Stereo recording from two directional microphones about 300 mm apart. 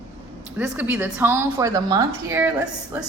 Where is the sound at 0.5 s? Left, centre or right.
Centre.